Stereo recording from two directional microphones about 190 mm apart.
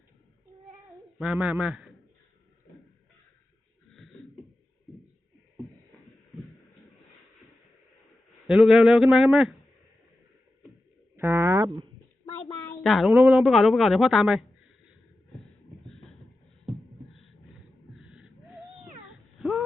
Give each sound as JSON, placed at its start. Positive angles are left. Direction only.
{"t": 0.9, "sound": "speech", "side_deg": -5}
{"t": 6.3, "sound": "heart murmur", "side_deg": 0}
{"t": 8.4, "sound": "a woman's voice", "side_deg": 0}
{"t": 11.2, "sound": "speech", "side_deg": -15}
{"t": 12.6, "sound": "a woman's voice", "side_deg": 0}
{"t": 16.6, "sound": "a sound", "side_deg": 0}
{"t": 19.0, "sound": "cat", "side_deg": 0}